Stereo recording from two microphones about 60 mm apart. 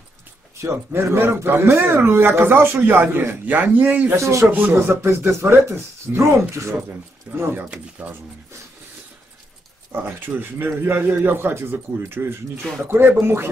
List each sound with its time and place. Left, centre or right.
0.6 s speech: right
4.1 s a man's voice: right
4.5 s speech: right
4.8 s speech: right
8.0 s speech: right
9.9 s speech: right